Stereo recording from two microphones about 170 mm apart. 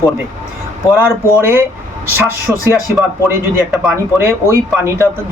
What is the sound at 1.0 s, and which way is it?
Speech, 15° right (ahead or behind).